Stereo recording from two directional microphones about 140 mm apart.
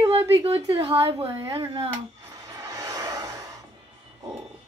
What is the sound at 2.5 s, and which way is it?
Vehicle, 25° right (ahead or behind).